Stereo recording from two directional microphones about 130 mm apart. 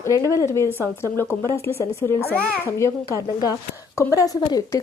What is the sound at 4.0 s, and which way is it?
Speech, 25° left (ahead or behind).